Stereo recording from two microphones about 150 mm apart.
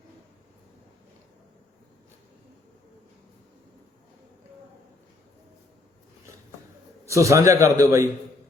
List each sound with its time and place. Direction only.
7.1 s a man's voice: 20° right (ahead or behind)